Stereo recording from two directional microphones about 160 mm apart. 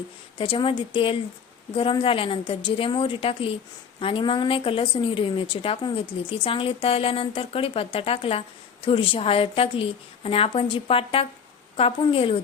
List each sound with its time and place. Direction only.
0.3 s speech: 35° left (ahead or behind)